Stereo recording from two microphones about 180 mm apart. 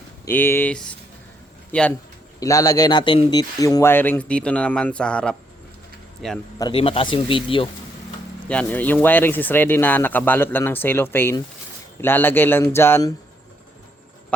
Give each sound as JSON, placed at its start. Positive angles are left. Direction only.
{"t": 0.3, "sound": "speech", "side_deg": 10}
{"t": 2.4, "sound": "speech", "side_deg": 20}
{"t": 6.6, "sound": "speech", "side_deg": 30}
{"t": 8.4, "sound": "speech", "side_deg": 10}